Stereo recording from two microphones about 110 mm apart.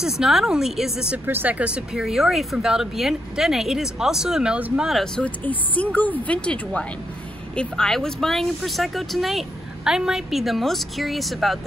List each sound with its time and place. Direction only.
0.0 s speech: 5° right (ahead or behind)
1.2 s speech: 15° right (ahead or behind)
4.8 s speech: 5° left (ahead or behind)